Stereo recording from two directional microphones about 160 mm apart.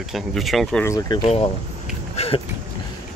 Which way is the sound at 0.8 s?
20° left (ahead or behind).